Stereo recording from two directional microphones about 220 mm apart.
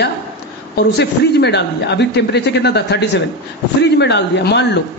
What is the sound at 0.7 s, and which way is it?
A man's voice, 50° left (ahead or behind).